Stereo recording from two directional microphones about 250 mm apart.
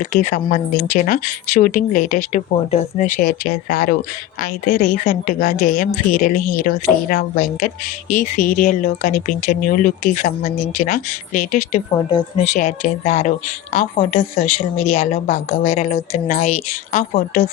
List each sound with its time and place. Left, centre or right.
0.0 s speech: left
11.9 s speech: centre
12.4 s a woman's voice: left